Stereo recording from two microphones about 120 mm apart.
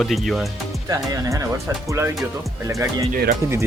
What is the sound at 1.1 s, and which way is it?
Speech, 30° right (ahead or behind).